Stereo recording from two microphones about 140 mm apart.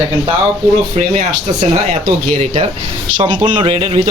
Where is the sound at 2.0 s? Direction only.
60° right (ahead or behind).